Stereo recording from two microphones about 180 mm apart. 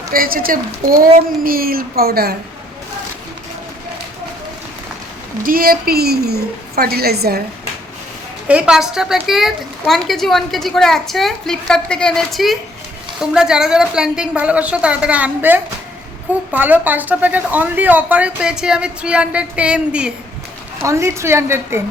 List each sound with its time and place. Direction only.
0.1 s a woman's voice: 55° right (ahead or behind)
5.4 s a woman's voice: 55° right (ahead or behind)
8.4 s a woman's voice: 5° right (ahead or behind)